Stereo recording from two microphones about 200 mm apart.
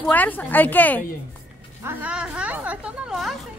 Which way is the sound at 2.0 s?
5° right (ahead or behind).